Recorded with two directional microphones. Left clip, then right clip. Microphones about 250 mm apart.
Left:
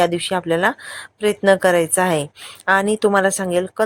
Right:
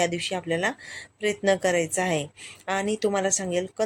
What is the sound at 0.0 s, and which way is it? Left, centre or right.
A woman's voice, centre.